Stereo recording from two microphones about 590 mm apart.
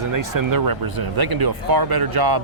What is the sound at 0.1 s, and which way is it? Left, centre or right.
Speech, right.